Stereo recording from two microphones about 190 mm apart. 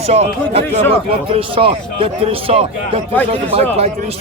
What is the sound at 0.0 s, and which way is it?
A man's voice, 35° right (ahead or behind).